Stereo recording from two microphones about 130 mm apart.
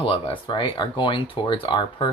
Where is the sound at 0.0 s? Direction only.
45° left (ahead or behind).